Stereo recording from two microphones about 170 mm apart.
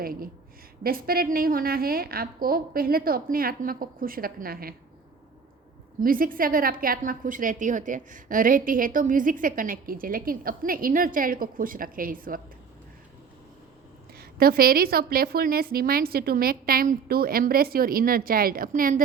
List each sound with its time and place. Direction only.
0.0 s a woman's voice: 60° right (ahead or behind)
6.0 s a woman's voice: 55° right (ahead or behind)
14.2 s a woman's voice: 60° right (ahead or behind)